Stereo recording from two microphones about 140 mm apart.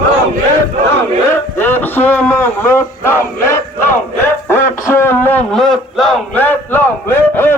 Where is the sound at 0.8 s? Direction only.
15° left (ahead or behind).